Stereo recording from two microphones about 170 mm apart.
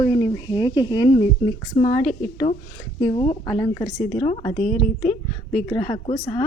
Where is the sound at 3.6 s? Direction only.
20° left (ahead or behind).